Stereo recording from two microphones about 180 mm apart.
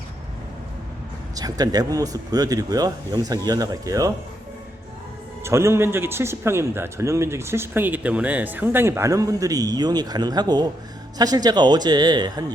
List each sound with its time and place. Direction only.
1.4 s speech: 20° right (ahead or behind)
5.4 s a man's voice: 15° right (ahead or behind)